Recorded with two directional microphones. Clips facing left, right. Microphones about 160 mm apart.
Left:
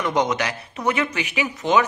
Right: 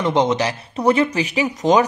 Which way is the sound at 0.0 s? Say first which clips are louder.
Right 4 dB; 25° right (ahead or behind).